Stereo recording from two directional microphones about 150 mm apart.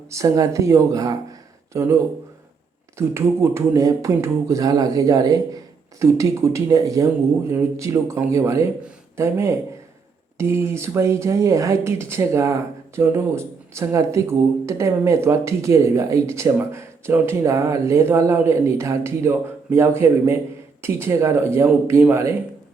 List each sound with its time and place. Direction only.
0.1 s speech: 20° right (ahead or behind)
3.2 s speech: 15° right (ahead or behind)